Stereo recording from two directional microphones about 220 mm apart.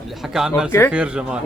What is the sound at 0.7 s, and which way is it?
Speech, 10° left (ahead or behind).